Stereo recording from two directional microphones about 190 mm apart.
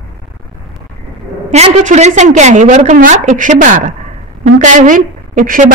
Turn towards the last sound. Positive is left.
turn(degrees=-45)  # may be behind; listen again after turning